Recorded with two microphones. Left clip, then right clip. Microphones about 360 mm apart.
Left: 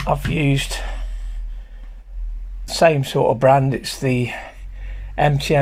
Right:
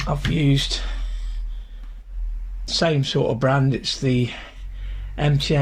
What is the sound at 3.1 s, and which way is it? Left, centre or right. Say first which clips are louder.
Speech: left 5 dB; left.